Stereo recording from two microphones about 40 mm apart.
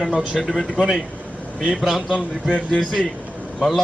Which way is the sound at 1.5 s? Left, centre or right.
Centre.